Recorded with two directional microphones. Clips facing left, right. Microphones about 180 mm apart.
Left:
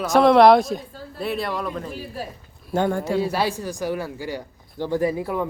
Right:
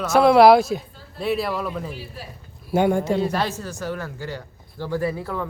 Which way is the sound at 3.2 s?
10° left (ahead or behind).